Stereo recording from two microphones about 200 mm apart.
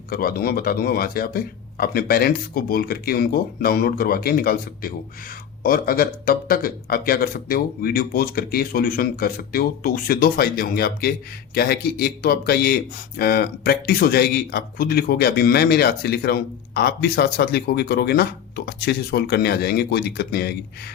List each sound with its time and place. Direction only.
0.1 s speech: 50° left (ahead or behind)